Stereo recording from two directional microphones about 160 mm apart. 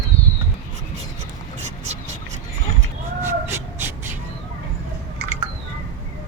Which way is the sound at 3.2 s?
15° right (ahead or behind).